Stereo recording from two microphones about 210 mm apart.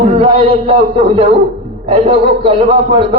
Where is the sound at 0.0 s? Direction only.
25° right (ahead or behind).